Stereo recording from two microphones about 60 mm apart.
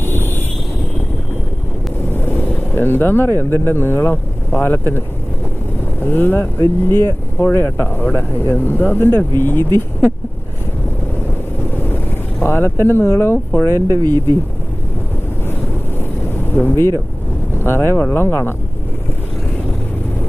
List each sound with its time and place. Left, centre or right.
0.0 s vehicle: left
2.1 s speech: left
11.7 s boat: left
12.4 s speech: left
16.5 s speech: left